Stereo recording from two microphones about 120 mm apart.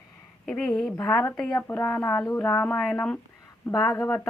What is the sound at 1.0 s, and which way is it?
Speech, 20° left (ahead or behind).